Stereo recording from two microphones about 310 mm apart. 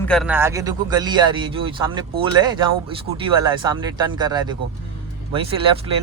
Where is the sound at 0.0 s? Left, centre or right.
Centre.